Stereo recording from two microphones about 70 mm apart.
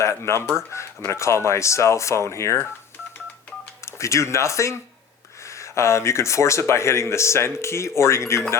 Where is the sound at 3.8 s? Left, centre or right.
Left.